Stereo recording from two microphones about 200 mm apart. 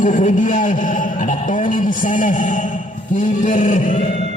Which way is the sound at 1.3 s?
40° left (ahead or behind).